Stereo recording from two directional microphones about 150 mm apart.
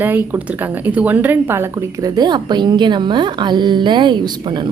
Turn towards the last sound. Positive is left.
turn(degrees=-30)  # may be behind; listen again after turning